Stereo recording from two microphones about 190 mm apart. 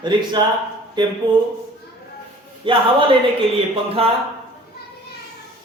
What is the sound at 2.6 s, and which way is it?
Speech, 25° right (ahead or behind).